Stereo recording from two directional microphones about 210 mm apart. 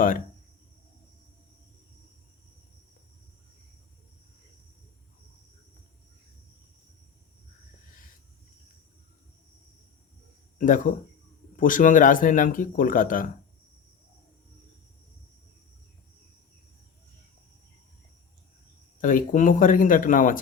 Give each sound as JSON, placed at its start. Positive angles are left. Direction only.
{"t": 10.6, "sound": "speech", "side_deg": 40}
{"t": 18.9, "sound": "speech", "side_deg": 40}